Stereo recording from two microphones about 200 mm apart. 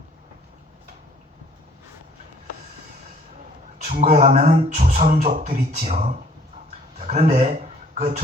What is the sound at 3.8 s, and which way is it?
A man's voice, 35° right (ahead or behind).